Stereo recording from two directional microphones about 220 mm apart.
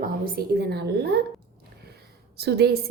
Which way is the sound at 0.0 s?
45° right (ahead or behind).